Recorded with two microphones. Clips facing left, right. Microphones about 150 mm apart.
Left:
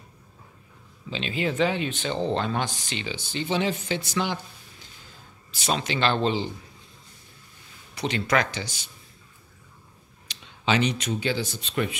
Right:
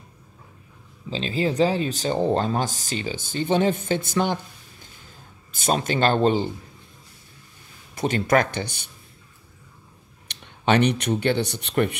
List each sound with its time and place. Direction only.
1.1 s speech: 35° right (ahead or behind)
5.5 s speech: 50° right (ahead or behind)
7.9 s speech: 50° right (ahead or behind)
10.2 s speech: 60° right (ahead or behind)